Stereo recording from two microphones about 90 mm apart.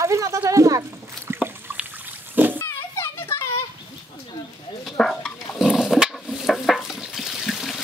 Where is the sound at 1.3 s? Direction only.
25° right (ahead or behind).